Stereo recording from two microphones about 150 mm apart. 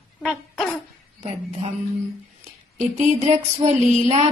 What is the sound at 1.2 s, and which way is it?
Speech, 40° right (ahead or behind).